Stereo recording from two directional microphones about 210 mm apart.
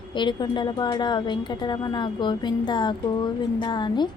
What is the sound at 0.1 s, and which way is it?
A woman's voice, 20° left (ahead or behind).